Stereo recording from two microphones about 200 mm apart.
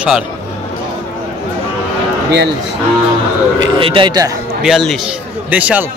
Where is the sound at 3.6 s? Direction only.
25° right (ahead or behind).